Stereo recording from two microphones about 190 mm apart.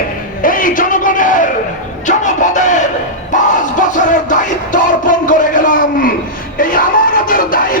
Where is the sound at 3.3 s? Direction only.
40° left (ahead or behind).